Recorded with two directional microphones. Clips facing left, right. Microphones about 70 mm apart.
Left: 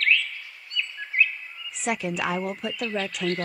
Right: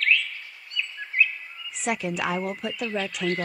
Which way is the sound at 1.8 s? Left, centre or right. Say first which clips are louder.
Even; centre.